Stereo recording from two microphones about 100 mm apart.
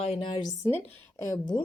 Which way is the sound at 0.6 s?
30° left (ahead or behind).